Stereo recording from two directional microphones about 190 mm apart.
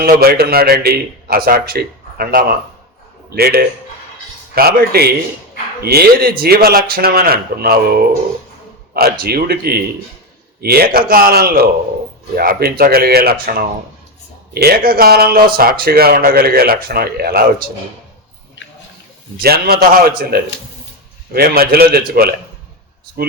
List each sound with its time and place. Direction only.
0.0 s a man's voice: 55° right (ahead or behind)
19.4 s a man's voice: 55° right (ahead or behind)